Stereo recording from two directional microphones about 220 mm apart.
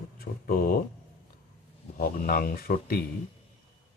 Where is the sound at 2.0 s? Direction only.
40° left (ahead or behind).